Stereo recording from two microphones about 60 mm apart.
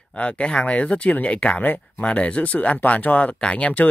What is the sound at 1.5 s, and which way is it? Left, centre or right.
Speech, left.